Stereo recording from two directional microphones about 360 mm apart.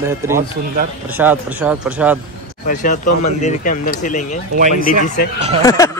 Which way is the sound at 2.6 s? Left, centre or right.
Left.